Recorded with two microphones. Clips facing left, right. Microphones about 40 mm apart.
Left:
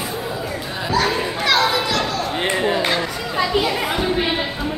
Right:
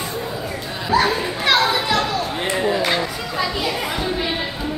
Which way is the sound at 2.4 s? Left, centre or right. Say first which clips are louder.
Left 1 dB; left.